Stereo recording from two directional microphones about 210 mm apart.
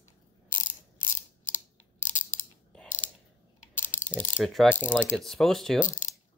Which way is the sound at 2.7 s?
5° left (ahead or behind).